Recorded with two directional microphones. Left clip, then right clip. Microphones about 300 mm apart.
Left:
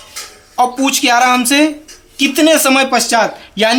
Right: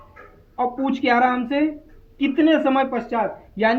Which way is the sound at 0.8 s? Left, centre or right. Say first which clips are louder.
Left 6 dB; left.